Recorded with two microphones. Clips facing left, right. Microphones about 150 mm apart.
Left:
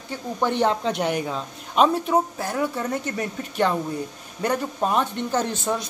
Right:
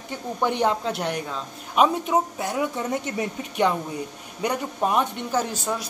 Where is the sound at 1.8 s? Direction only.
15° right (ahead or behind).